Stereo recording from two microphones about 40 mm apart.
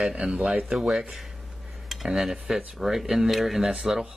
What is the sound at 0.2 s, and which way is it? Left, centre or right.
Speech, right.